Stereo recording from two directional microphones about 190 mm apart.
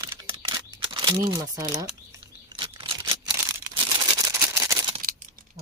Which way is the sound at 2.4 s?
25° right (ahead or behind).